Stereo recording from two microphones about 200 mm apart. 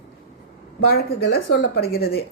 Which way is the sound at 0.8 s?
50° left (ahead or behind).